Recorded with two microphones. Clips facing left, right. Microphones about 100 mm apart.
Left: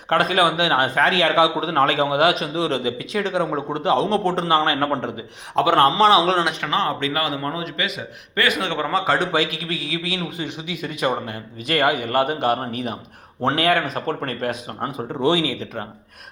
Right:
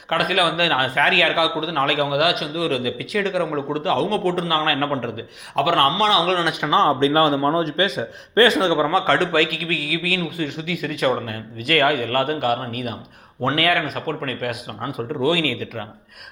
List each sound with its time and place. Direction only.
0.1 s a man's voice: 30° left (ahead or behind)
6.5 s a man's voice: 15° right (ahead or behind)
8.9 s a man's voice: centre (ahead or behind)
9.1 s a man's voice: 20° left (ahead or behind)